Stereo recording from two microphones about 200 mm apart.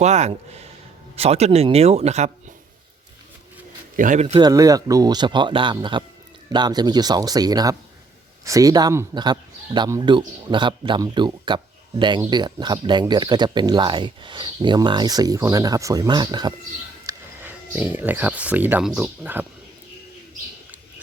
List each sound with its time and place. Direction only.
0.0 s speech: 35° right (ahead or behind)
3.9 s speech: 40° right (ahead or behind)
4.4 s speech: 20° right (ahead or behind)
17.1 s speech: 10° right (ahead or behind)